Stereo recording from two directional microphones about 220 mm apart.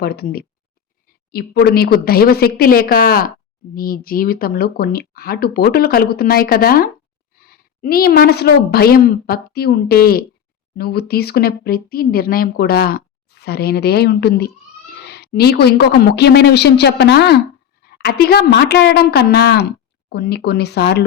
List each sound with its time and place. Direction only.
0.0 s speech: 45° left (ahead or behind)